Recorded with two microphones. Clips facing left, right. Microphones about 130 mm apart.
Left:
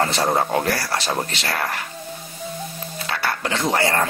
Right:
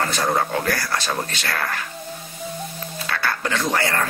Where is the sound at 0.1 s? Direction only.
30° left (ahead or behind).